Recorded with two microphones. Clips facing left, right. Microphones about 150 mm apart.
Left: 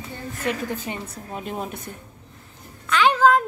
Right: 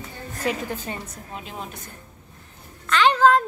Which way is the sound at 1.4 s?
55° left (ahead or behind).